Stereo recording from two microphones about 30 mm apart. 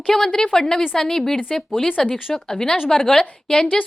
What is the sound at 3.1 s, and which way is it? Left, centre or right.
Speech, left.